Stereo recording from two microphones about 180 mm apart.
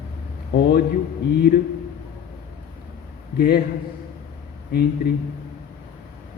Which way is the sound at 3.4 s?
60° left (ahead or behind).